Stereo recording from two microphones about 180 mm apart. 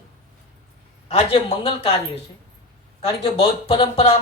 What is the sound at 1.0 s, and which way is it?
Speech, 30° left (ahead or behind).